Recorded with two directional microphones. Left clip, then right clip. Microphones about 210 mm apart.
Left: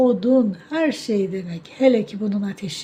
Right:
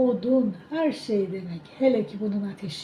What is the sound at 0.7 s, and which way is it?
A woman's voice, 25° left (ahead or behind).